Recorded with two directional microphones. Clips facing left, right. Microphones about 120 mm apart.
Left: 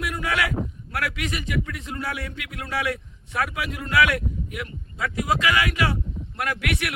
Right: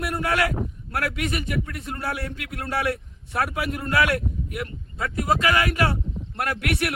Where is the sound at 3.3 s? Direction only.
40° right (ahead or behind).